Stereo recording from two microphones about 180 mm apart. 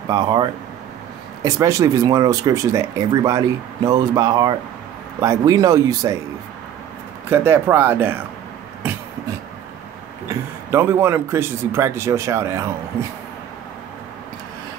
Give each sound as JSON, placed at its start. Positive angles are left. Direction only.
{"t": 0.1, "sound": "speech", "side_deg": -20}
{"t": 7.2, "sound": "speech", "side_deg": -10}
{"t": 10.7, "sound": "speech", "side_deg": -15}